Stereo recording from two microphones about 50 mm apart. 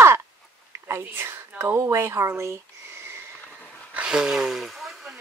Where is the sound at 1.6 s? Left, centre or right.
Right.